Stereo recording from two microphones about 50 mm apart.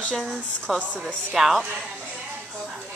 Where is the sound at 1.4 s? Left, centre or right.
Centre.